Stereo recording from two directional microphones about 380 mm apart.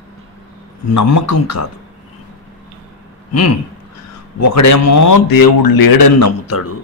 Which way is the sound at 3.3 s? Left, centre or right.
Left.